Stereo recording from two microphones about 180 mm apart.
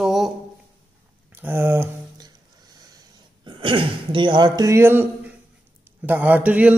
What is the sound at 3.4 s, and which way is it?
Speech, 30° right (ahead or behind).